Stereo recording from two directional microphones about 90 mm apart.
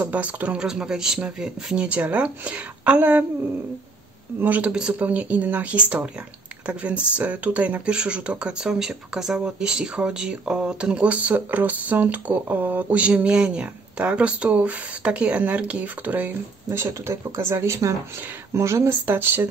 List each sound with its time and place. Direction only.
0.0 s speech: 15° right (ahead or behind)
4.4 s speech: 15° right (ahead or behind)